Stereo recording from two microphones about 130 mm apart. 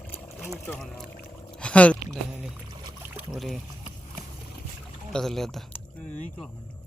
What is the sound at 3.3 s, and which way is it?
Speech, centre (ahead or behind).